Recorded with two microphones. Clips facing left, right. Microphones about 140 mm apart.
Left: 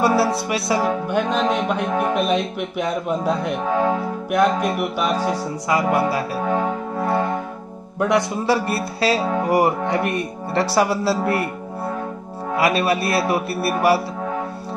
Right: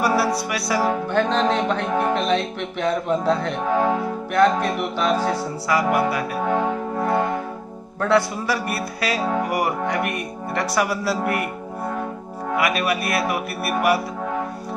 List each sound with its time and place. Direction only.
0.0 s music: 25° left (ahead or behind)
5.7 s music: 25° left (ahead or behind)
8.0 s music: 15° left (ahead or behind)
8.5 s music: 30° left (ahead or behind)
12.5 s music: 30° left (ahead or behind)